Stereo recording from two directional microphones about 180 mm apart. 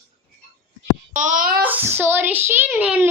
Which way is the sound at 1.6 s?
10° right (ahead or behind).